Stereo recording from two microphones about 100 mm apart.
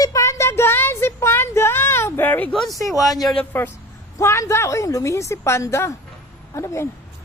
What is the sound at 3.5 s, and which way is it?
Speech, 20° left (ahead or behind).